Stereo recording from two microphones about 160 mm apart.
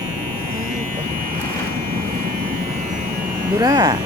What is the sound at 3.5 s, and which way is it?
Speech, 25° right (ahead or behind).